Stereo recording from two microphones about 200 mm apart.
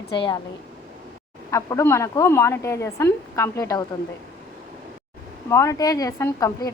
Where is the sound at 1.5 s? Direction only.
15° left (ahead or behind).